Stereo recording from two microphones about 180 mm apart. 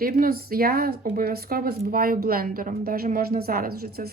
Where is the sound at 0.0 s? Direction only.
55° right (ahead or behind).